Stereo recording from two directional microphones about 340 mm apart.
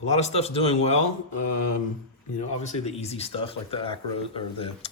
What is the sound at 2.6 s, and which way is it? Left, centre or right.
Speech, centre.